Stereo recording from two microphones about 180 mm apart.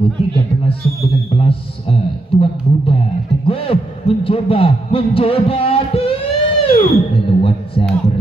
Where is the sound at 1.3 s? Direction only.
30° left (ahead or behind).